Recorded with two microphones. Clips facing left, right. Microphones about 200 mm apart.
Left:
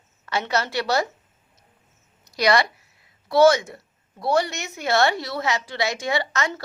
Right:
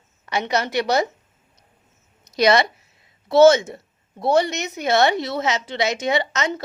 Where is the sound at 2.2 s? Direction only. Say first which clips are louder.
Right 3 dB; 20° right (ahead or behind).